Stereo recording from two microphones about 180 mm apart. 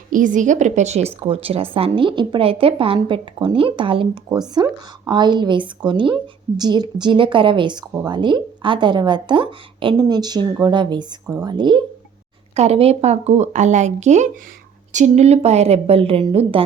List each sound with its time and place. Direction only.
0.1 s a woman's voice: 45° right (ahead or behind)